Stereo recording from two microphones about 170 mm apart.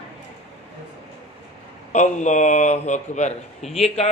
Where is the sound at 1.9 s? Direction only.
45° left (ahead or behind).